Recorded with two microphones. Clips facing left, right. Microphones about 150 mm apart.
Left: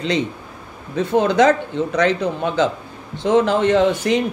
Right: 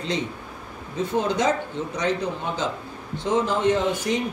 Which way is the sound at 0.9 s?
75° left (ahead or behind).